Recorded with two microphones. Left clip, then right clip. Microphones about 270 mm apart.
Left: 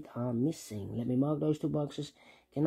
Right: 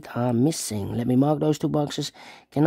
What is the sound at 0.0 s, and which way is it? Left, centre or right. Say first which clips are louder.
Speech: right 11 dB; right.